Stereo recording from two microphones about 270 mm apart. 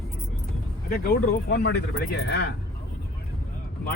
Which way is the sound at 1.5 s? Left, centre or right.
Left.